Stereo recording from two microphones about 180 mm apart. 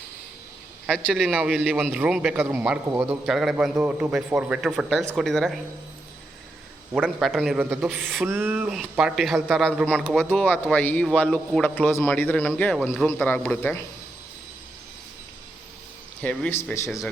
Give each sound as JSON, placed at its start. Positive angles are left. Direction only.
{"t": 0.9, "sound": "a man's voice", "side_deg": 5}
{"t": 6.9, "sound": "a man's voice", "side_deg": -5}
{"t": 10.4, "sound": "a man's voice", "side_deg": 10}
{"t": 16.2, "sound": "a man's voice", "side_deg": 5}